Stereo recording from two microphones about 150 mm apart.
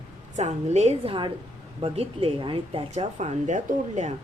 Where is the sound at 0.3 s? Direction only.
50° right (ahead or behind).